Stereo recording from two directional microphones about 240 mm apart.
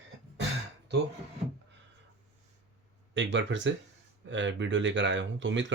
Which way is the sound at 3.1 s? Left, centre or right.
Right.